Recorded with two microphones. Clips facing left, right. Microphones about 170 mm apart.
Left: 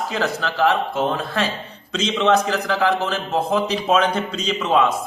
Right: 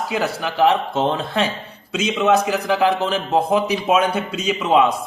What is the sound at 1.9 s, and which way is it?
A man's voice, 10° right (ahead or behind).